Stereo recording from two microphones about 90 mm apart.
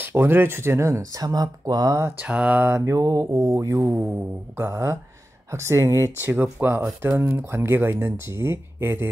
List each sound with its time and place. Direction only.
0.0 s speech: 25° right (ahead or behind); by 2.0 s 45° right (ahead or behind)
2.0 s mantra: 15° right (ahead or behind)
2.6 s speech: 35° right (ahead or behind)
3.8 s speech: 20° right (ahead or behind)
6.2 s speech: 25° right (ahead or behind)